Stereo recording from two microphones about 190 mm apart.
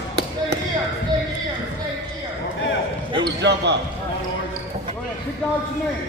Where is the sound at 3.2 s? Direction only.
65° right (ahead or behind).